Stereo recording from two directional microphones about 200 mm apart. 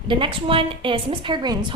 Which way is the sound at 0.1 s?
25° right (ahead or behind).